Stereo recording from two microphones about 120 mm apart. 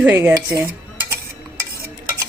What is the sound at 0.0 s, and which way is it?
Speech, 15° right (ahead or behind).